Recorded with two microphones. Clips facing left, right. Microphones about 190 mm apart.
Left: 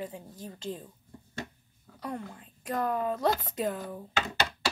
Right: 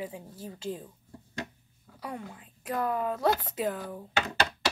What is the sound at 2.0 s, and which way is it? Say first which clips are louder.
Speech: left 2 dB; 5° right (ahead or behind).